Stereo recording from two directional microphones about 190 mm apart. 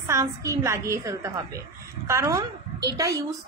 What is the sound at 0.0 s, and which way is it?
A woman's voice, 15° right (ahead or behind).